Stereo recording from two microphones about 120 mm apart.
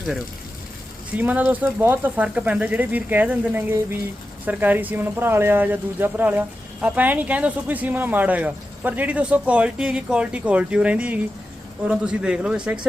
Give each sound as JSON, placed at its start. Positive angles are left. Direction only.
{"t": 1.1, "sound": "speech", "side_deg": -15}